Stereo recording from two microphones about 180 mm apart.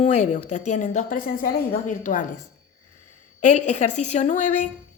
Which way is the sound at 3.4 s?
40° left (ahead or behind).